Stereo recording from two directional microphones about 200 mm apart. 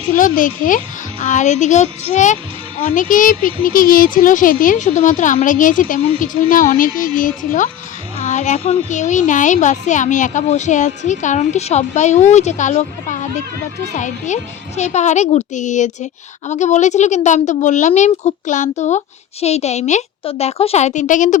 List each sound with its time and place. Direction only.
0.2 s speech: 40° left (ahead or behind)